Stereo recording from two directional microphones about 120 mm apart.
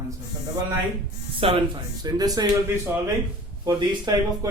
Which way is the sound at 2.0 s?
35° right (ahead or behind).